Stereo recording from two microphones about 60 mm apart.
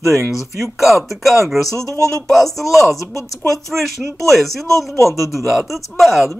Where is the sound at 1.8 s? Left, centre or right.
Left.